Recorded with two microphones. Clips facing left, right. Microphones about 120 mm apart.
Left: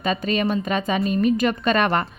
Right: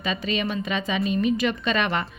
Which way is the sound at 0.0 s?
45° left (ahead or behind).